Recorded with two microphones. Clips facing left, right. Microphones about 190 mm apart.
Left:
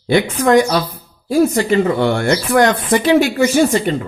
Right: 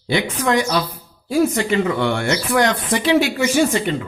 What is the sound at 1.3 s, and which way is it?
Speech, 40° left (ahead or behind).